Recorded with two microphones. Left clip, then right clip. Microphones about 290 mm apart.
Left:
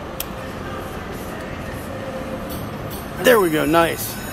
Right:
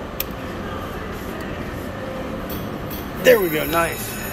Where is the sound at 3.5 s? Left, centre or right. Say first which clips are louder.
Left 4 dB; left.